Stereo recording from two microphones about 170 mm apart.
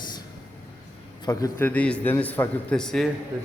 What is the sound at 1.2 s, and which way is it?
A man's voice, 20° left (ahead or behind).